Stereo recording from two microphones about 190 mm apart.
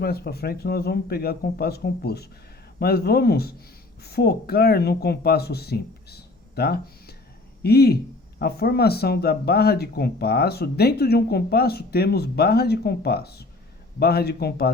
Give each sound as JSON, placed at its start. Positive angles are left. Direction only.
{"t": 0.0, "sound": "speech", "side_deg": 55}